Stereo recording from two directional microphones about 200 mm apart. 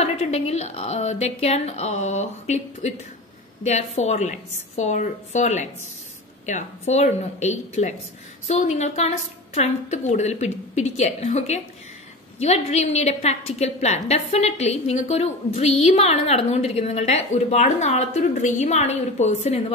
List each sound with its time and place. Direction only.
0.0 s a woman's voice: 30° left (ahead or behind)